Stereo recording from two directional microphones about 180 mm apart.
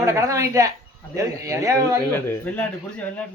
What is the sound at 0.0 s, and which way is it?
A man's voice, 15° right (ahead or behind).